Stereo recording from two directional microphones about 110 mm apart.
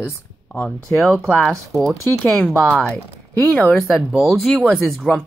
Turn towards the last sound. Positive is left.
turn(degrees=0)  # may be behind; listen again after turning